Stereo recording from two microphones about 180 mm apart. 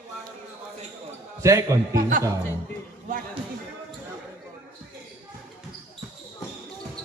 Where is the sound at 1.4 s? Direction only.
15° right (ahead or behind).